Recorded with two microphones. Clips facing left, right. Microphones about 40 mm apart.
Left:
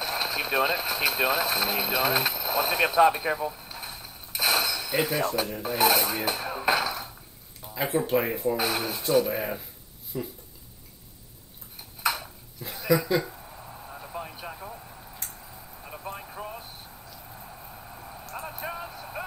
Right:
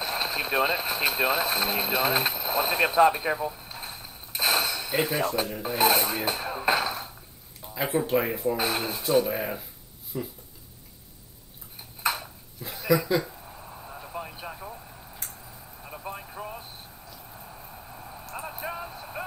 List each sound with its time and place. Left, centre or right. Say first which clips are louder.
0.0 s speech: even; centre
3.0 s speech: even; centre
3.7 s a sound: even; centre
5.5 s speech: even; centre
6.6 s a sound: even; centre
7.6 s speech: even; centre
8.6 s speech: even; centre
12.1 s dishes: even; centre
13.8 s a sound: even; centre